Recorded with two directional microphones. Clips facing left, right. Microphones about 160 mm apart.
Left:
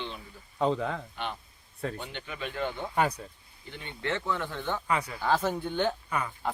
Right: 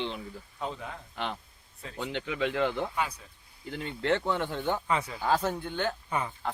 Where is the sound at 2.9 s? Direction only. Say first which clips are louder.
Left 5 dB; 50° left (ahead or behind).